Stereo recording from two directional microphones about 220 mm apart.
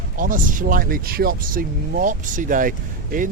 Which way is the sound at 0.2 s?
35° right (ahead or behind).